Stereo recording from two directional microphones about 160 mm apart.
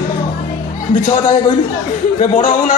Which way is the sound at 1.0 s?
55° left (ahead or behind).